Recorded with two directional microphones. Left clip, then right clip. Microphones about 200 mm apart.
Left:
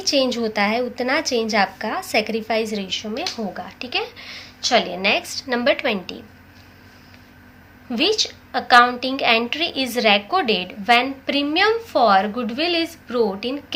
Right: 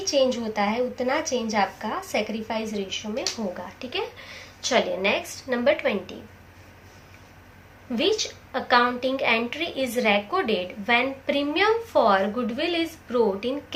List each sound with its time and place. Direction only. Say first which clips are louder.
0.0 s a woman's voice: left 3 dB; 50° left (ahead or behind)
3.8 s a woman's voice: left 5 dB; 30° left (ahead or behind)
7.9 s a woman's voice: left 4 dB; 35° left (ahead or behind)